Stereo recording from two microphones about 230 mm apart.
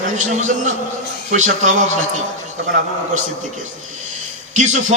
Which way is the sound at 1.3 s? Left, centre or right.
Right.